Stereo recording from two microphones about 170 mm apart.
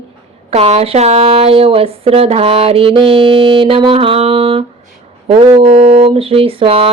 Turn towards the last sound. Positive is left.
turn(degrees=-35)  # may be behind; listen again after turning